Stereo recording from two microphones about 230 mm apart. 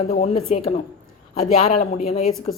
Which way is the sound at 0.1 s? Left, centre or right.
Left.